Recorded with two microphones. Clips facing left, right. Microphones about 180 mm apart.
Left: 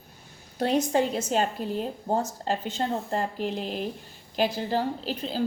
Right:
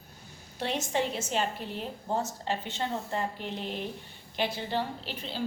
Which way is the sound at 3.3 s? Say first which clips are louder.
Left 7 dB; 90° left.